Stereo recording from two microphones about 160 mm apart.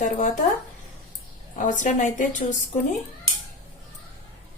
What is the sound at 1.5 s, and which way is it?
A woman's voice, 50° left (ahead or behind).